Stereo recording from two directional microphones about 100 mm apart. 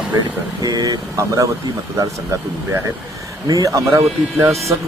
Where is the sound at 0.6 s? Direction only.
40° right (ahead or behind).